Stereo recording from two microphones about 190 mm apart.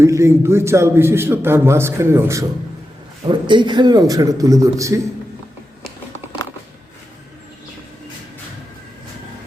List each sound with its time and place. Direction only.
0.0 s a man's voice: 15° right (ahead or behind)
3.2 s a man's voice: 25° right (ahead or behind)